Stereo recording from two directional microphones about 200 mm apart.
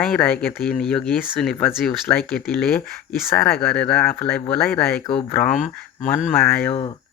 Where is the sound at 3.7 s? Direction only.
5° left (ahead or behind).